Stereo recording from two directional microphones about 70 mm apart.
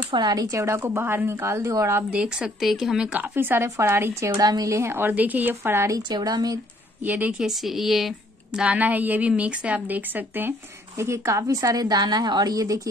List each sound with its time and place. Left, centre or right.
0.2 s a woman's voice: right
2.0 s speech: centre
3.1 s a woman's voice: right
4.4 s a woman's voice: right
5.6 s a woman's voice: right
6.0 s speech: right
7.1 s speech: centre
7.4 s speech: centre
8.5 s speech: right
11.0 s a woman's voice: right